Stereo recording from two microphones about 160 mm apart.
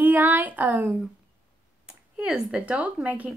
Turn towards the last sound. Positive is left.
turn(degrees=-5)  # may be behind; listen again after turning